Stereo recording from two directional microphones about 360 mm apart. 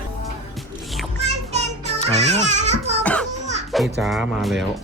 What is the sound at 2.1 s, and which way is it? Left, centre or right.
Speech, centre.